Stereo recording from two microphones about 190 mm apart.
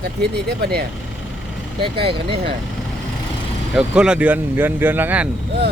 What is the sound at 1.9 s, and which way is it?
Speech, 30° right (ahead or behind).